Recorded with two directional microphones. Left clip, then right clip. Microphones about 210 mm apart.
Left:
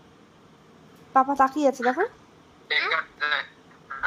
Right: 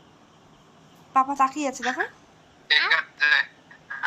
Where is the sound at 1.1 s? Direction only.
25° left (ahead or behind).